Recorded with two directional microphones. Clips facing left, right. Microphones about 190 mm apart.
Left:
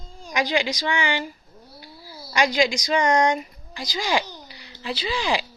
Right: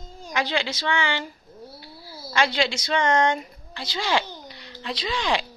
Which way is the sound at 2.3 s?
15° left (ahead or behind).